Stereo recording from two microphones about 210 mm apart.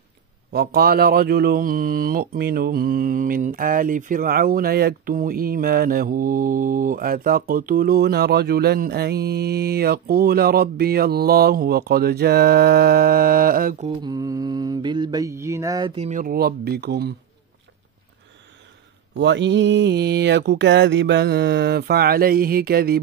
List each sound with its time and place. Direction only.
0.5 s speech: 50° right (ahead or behind)
13.7 s mantra: 30° right (ahead or behind)
14.1 s mantra: 15° right (ahead or behind); by 17.1 s 50° right (ahead or behind)
19.1 s speech: 55° right (ahead or behind)